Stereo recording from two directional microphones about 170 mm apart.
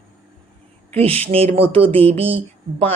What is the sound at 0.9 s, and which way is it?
Speech, 35° right (ahead or behind).